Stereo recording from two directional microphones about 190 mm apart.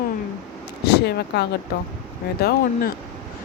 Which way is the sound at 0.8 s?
60° left (ahead or behind).